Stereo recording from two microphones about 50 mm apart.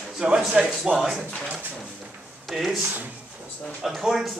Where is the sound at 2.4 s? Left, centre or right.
Centre.